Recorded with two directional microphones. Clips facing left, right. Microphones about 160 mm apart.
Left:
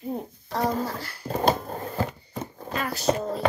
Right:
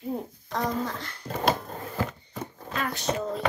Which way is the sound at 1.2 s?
35° left (ahead or behind).